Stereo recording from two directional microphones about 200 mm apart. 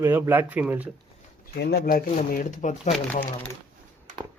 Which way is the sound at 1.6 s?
50° left (ahead or behind).